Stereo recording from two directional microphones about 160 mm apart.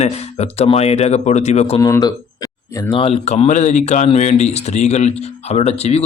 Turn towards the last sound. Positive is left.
turn(degrees=40)  # may be behind; listen again after turning